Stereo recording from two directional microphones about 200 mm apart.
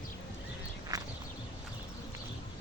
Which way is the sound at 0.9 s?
15° right (ahead or behind).